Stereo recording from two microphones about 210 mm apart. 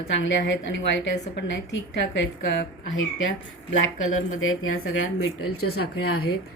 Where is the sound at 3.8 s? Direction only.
70° left (ahead or behind).